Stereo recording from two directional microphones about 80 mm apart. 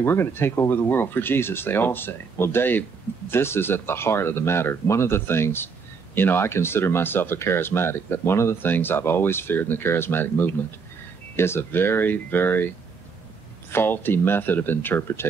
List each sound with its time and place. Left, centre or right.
0.0 s speech: left